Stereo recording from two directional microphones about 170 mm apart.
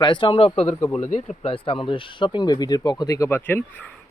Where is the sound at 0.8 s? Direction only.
10° left (ahead or behind).